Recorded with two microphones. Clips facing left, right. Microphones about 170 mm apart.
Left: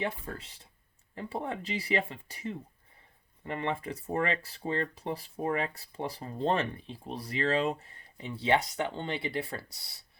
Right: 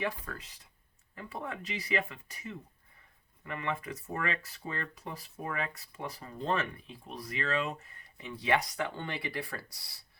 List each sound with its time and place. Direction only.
0.0 s speech: 25° left (ahead or behind)